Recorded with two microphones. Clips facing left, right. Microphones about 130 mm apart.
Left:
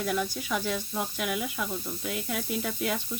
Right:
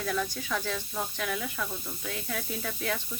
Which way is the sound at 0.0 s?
10° left (ahead or behind).